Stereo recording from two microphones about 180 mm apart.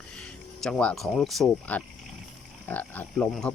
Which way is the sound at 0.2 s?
5° left (ahead or behind).